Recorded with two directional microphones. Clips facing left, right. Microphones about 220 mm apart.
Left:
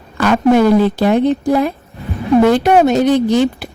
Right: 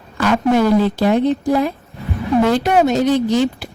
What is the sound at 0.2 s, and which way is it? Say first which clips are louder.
Speech: left 4 dB; 60° left (ahead or behind).